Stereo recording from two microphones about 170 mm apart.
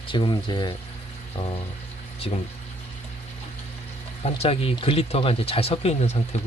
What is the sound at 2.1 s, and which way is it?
Speech, 35° left (ahead or behind).